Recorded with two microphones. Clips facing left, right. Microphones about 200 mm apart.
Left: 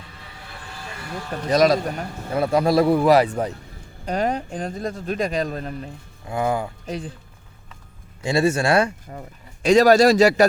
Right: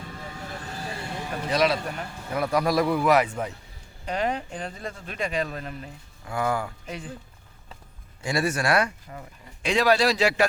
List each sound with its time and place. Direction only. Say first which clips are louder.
0.0 s vehicle: right 5 dB; 45° right (ahead or behind)
1.5 s speech: left 7 dB; 40° left (ahead or behind)
2.3 s speech: left 5 dB; 25° left (ahead or behind)
6.2 s speech: left 4 dB; 20° left (ahead or behind)
8.2 s speech: left 6 dB; 25° left (ahead or behind)
9.6 s a man's voice: left 8 dB; 45° left (ahead or behind)